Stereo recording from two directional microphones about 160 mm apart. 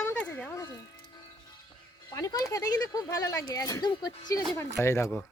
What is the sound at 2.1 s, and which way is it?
Speech, 25° left (ahead or behind).